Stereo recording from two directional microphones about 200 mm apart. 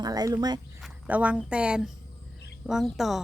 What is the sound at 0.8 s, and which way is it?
A woman's voice, 5° right (ahead or behind).